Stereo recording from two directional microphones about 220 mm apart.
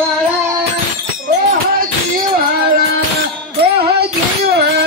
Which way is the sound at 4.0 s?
45° right (ahead or behind).